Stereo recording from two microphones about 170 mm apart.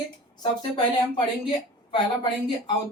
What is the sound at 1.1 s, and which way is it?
Speech, 25° left (ahead or behind).